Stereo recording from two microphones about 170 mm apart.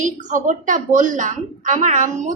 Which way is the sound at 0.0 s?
50° right (ahead or behind).